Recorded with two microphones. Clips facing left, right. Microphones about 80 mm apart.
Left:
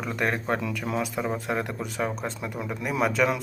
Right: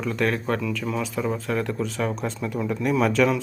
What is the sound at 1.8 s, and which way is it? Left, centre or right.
Speech, centre.